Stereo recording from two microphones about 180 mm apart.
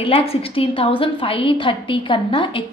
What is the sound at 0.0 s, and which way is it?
A woman's voice, 30° left (ahead or behind).